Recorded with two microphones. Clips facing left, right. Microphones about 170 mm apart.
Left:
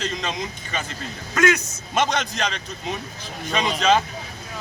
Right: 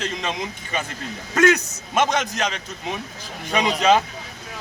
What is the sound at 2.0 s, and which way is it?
A man's voice, 5° right (ahead or behind).